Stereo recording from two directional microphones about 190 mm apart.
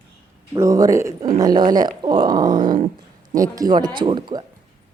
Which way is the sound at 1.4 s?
20° right (ahead or behind).